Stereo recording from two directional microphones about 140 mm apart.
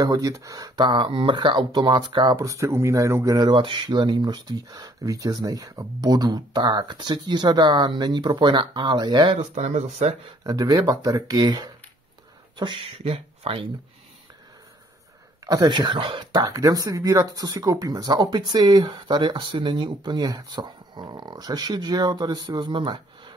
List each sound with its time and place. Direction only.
0.0 s speech: 25° right (ahead or behind)
9.4 s speech: 55° right (ahead or behind)
10.4 s speech: 30° right (ahead or behind)
15.4 s speech: 30° right (ahead or behind)